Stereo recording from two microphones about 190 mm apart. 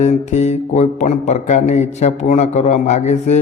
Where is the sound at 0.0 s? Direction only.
35° left (ahead or behind).